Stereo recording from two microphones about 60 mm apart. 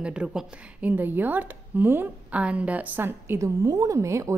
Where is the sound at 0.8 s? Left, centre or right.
Right.